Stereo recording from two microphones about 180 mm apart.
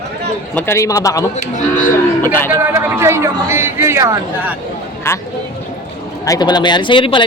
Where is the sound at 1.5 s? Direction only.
45° left (ahead or behind).